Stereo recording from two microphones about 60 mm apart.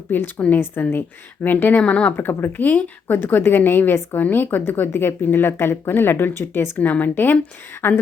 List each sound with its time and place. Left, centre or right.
0.3 s a woman's voice: left
0.6 s speech: left
1.8 s a woman's voice: centre
2.1 s speech: left
6.7 s a woman's voice: left